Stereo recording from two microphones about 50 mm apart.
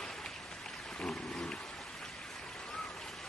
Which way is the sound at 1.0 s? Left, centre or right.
Centre.